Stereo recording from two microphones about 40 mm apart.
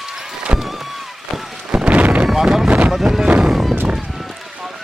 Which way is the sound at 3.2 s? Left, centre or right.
Right.